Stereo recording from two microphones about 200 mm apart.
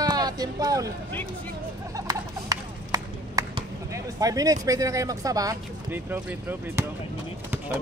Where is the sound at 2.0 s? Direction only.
20° right (ahead or behind).